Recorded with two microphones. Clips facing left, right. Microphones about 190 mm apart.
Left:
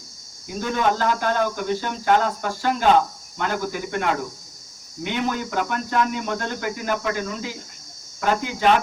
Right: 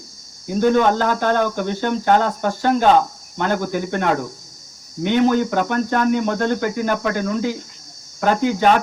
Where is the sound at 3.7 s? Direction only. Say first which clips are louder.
Right 4 dB; 35° right (ahead or behind).